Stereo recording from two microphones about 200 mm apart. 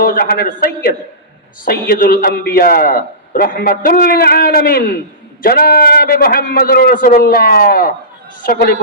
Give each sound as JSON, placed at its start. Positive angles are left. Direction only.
{"t": 0.0, "sound": "a man's voice", "side_deg": 45}